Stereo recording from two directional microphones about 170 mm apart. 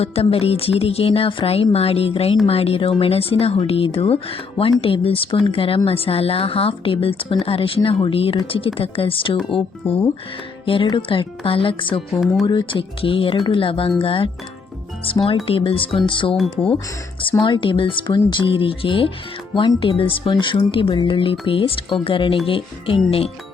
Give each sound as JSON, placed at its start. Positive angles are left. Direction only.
{"t": 0.0, "sound": "speech", "side_deg": 35}
{"t": 16.3, "sound": "speech", "side_deg": 5}
{"t": 17.4, "sound": "speech", "side_deg": 30}